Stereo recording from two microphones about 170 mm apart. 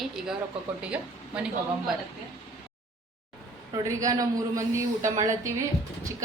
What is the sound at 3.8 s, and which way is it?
A woman's voice, 20° right (ahead or behind).